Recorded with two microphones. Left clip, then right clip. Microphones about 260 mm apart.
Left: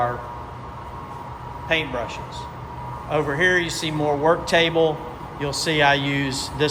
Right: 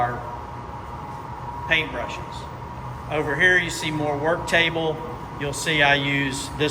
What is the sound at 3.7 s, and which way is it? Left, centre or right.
A man's voice, centre.